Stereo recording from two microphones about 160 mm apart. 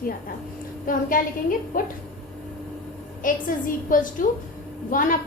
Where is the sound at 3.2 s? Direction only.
60° left (ahead or behind).